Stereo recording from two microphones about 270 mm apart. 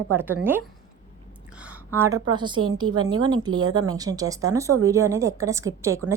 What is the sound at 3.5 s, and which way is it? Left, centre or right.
Speech, right.